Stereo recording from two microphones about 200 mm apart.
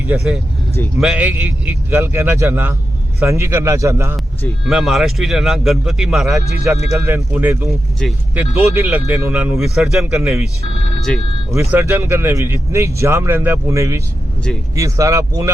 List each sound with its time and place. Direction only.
0.9 s speech: 5° right (ahead or behind)
4.6 s speech: centre (ahead or behind)
6.9 s speech: 15° right (ahead or behind)
7.7 s speech: centre (ahead or behind)
11.5 s speech: 15° right (ahead or behind)